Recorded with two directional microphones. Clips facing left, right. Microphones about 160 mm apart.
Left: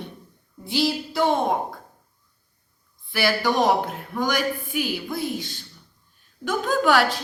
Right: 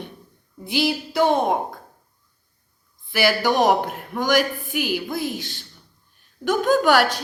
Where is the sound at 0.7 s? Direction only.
15° right (ahead or behind).